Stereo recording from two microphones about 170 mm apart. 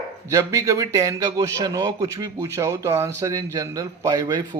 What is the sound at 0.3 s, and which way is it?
A man's voice, 20° right (ahead or behind).